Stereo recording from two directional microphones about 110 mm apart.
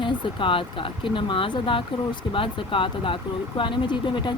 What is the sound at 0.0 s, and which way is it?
Speech, 50° left (ahead or behind).